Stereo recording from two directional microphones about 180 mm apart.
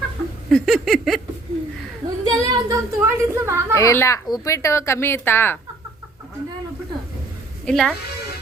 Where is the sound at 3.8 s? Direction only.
15° left (ahead or behind).